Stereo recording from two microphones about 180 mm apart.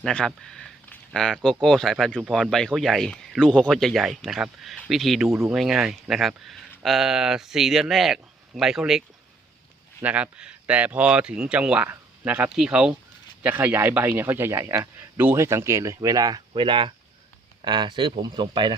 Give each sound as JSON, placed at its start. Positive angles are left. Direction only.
{"t": 0.0, "sound": "speech", "side_deg": 5}
{"t": 5.3, "sound": "a man's voice", "side_deg": -15}
{"t": 5.5, "sound": "a man's voice", "side_deg": -5}